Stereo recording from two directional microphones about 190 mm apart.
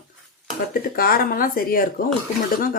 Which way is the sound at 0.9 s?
50° left (ahead or behind).